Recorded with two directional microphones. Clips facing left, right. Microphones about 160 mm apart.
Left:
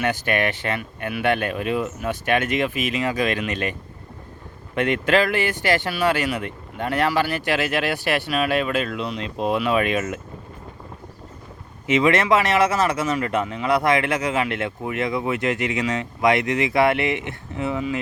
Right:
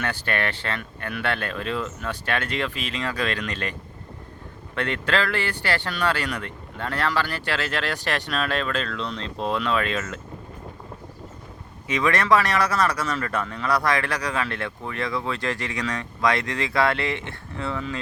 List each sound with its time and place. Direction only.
0.0 s speech: 15° left (ahead or behind)
11.9 s speech: 25° left (ahead or behind)